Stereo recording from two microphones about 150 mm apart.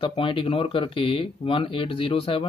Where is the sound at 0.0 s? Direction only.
35° left (ahead or behind).